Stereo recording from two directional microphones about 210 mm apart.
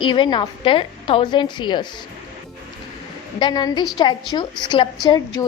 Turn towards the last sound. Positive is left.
turn(degrees=20)  # may be behind; listen again after turning